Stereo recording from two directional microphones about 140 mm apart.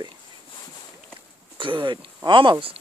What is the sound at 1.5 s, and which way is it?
Speech, 35° right (ahead or behind).